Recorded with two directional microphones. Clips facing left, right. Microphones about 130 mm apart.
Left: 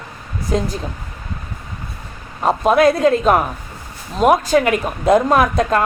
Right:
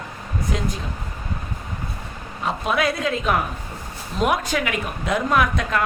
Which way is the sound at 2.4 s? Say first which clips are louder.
Left 9 dB; 40° left (ahead or behind).